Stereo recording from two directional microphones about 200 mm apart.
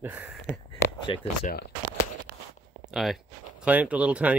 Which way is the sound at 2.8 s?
Centre (ahead or behind).